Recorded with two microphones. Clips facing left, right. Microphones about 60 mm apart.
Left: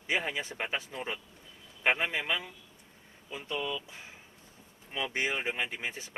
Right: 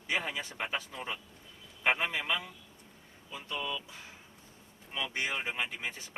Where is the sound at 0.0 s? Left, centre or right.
Left.